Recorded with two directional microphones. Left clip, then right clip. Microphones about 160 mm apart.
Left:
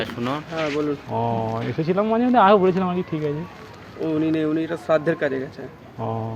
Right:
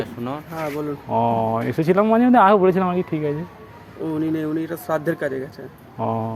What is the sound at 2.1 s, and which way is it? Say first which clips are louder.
Speech: even; 90° right.